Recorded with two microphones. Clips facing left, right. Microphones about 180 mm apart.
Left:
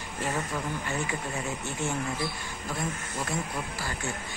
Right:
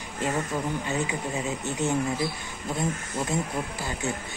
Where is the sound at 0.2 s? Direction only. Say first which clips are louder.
Right 4 dB; 20° right (ahead or behind).